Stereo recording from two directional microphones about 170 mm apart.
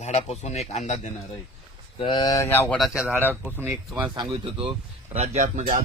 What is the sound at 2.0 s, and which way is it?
Speech, 25° left (ahead or behind).